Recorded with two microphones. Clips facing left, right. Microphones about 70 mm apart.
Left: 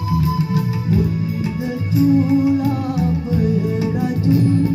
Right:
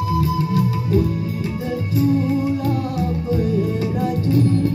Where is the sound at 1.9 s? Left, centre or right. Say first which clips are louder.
Left 4 dB; centre.